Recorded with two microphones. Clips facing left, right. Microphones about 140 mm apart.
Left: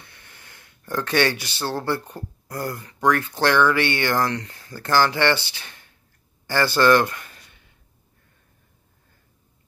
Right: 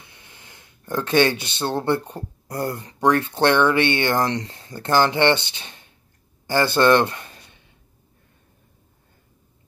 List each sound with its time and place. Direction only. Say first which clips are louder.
0.0 s speech: right 1 dB; 15° right (ahead or behind)